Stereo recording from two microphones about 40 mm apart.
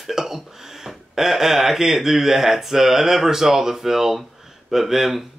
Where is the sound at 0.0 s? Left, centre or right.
Centre.